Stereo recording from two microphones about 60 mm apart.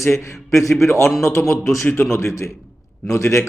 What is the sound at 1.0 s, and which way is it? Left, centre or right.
Speech, centre.